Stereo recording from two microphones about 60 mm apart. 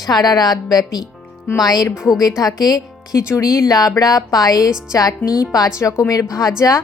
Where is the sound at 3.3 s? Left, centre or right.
Left.